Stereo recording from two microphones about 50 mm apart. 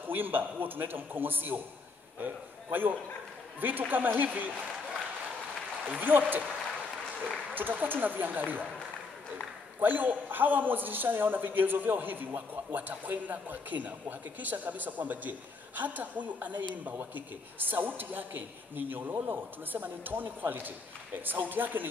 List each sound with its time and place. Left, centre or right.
0.1 s a man's voice: right
5.9 s a man's voice: right
7.5 s a man's voice: right
9.8 s a man's voice: right